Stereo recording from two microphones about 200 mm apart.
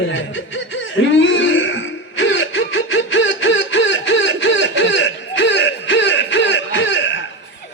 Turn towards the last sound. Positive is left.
turn(degrees=65)  # may be behind; listen again after turning